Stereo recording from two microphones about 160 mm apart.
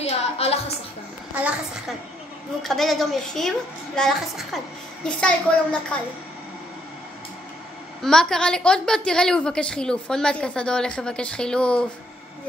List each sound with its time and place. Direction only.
0.0 s a sound: 40° left (ahead or behind)
1.3 s a woman's voice: 5° right (ahead or behind)
8.0 s a woman's voice: 5° left (ahead or behind)